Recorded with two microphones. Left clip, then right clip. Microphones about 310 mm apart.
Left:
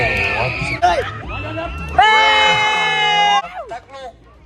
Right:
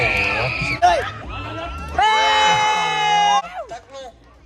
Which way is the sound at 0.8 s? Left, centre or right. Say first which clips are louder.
Even; right.